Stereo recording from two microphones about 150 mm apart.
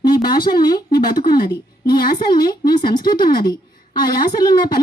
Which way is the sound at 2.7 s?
30° left (ahead or behind).